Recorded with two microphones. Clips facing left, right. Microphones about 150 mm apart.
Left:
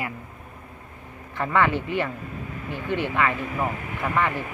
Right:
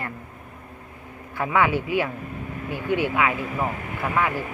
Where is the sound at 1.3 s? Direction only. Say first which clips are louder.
Right 1 dB; 5° right (ahead or behind).